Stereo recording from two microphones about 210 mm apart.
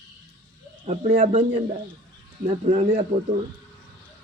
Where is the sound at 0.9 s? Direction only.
30° right (ahead or behind).